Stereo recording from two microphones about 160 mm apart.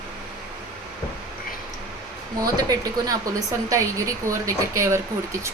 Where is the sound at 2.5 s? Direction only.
20° right (ahead or behind).